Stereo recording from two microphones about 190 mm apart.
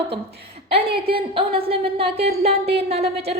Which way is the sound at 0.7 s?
30° right (ahead or behind).